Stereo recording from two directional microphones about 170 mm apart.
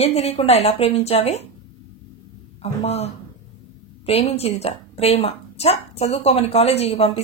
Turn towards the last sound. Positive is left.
turn(degrees=35)  # may be behind; listen again after turning